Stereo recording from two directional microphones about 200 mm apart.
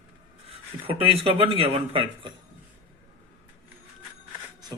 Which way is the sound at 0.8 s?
30° right (ahead or behind).